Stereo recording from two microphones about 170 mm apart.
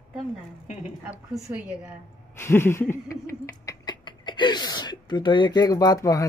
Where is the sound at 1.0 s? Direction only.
5° right (ahead or behind).